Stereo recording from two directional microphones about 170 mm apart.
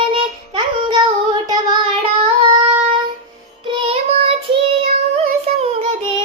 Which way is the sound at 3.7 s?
35° right (ahead or behind).